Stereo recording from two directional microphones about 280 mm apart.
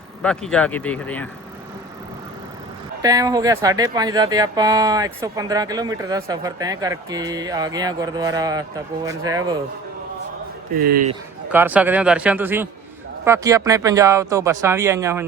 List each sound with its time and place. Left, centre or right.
0.2 s a man's voice: centre
3.0 s speech: centre
10.8 s speech: right
11.4 s a man's voice: centre